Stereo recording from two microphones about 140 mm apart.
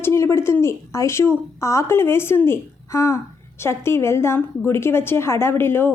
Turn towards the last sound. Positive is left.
turn(degrees=15)  # may be behind; listen again after turning